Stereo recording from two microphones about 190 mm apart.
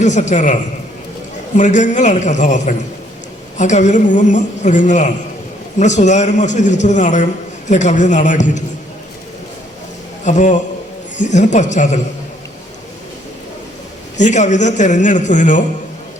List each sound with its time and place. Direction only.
0.0 s a woman's voice: 40° left (ahead or behind)
10.2 s a woman's voice: 40° left (ahead or behind)
14.2 s a woman's voice: 40° left (ahead or behind)